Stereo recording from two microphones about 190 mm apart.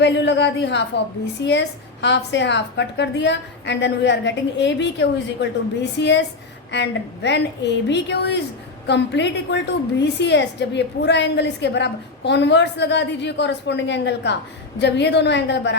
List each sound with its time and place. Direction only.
0.0 s a woman's voice: 65° left (ahead or behind)